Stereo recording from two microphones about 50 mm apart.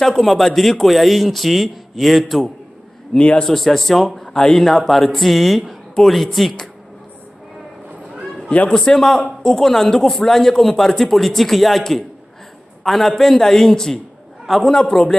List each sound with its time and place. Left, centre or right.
0.0 s speech: centre
3.2 s a man's voice: left
3.4 s speech: centre
8.5 s a man's voice: left
8.7 s a man's voice: centre